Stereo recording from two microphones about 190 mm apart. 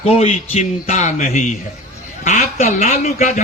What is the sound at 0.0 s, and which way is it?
Speech, 35° left (ahead or behind).